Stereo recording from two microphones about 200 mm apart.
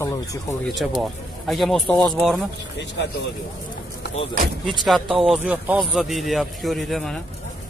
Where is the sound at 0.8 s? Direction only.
Centre (ahead or behind).